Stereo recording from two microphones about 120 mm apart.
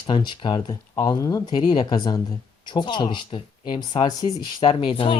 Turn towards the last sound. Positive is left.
turn(degrees=50)  # may be behind; listen again after turning